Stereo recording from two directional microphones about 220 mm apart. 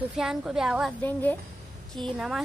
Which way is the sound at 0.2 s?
Centre (ahead or behind).